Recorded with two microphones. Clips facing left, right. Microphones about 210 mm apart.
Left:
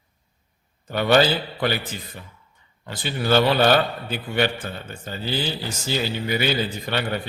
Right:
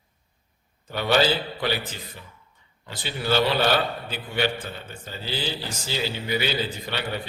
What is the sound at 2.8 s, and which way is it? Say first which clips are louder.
Speech: left 4 dB; 50° left (ahead or behind).